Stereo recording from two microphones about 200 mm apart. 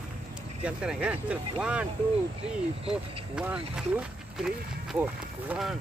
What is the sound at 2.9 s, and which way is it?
Speech, 5° right (ahead or behind).